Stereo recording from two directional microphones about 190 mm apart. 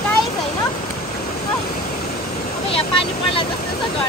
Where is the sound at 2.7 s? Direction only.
30° left (ahead or behind).